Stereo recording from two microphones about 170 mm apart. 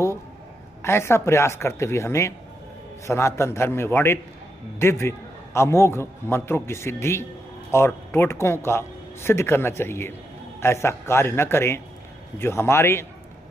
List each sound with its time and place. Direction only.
0.8 s a man's voice: 15° left (ahead or behind)